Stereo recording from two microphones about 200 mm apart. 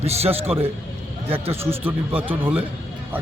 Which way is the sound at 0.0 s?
30° right (ahead or behind).